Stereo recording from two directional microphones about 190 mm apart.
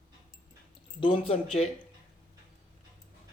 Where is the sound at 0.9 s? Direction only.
25° left (ahead or behind).